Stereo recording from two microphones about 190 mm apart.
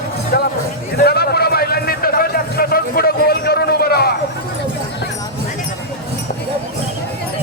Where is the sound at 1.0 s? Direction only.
55° left (ahead or behind).